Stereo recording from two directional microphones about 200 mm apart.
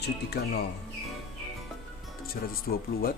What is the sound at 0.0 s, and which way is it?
Speech, 55° left (ahead or behind).